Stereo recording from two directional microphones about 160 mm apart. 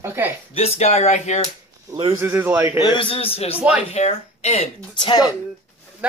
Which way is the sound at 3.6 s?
10° right (ahead or behind).